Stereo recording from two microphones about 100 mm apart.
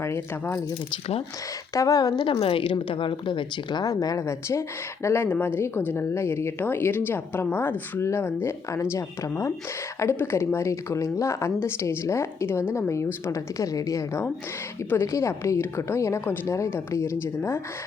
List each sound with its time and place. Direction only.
0.0 s a woman's voice: 25° left (ahead or behind)
1.7 s a woman's voice: 35° left (ahead or behind)
2.2 s a woman's voice: 70° left (ahead or behind); by 17.6 s 25° left (ahead or behind)